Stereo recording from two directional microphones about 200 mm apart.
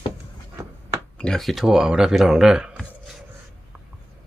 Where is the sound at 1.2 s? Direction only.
Centre (ahead or behind).